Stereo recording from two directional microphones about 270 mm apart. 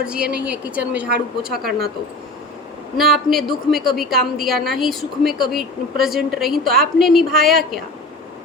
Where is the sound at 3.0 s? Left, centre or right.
Centre.